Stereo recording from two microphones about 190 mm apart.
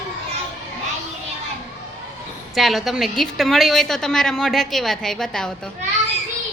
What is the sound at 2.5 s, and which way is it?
Speech, centre (ahead or behind).